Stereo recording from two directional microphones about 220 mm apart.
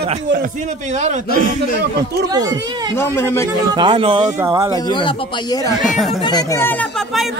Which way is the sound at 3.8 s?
20° right (ahead or behind).